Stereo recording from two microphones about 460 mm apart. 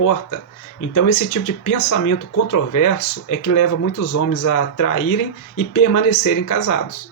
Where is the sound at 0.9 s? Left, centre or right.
Left.